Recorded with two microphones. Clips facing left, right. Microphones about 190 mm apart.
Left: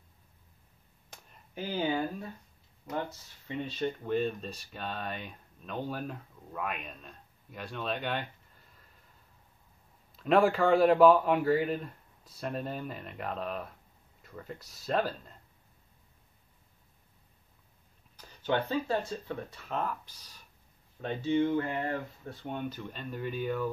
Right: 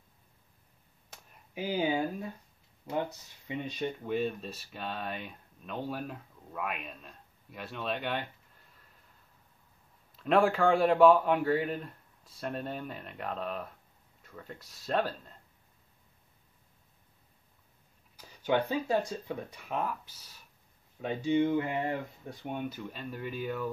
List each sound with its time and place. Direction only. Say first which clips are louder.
1.1 s a sound: right 1 dB; 5° right (ahead or behind)
2.9 s speech: right 2 dB; 15° right (ahead or behind)
10.2 s speech: left 1 dB; centre (ahead or behind)
18.1 s speech: right 2 dB; 10° right (ahead or behind)